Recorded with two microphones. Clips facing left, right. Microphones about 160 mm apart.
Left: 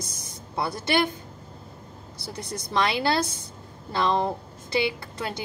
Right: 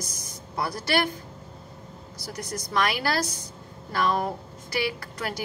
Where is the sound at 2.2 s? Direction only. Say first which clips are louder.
Even; 30° left (ahead or behind).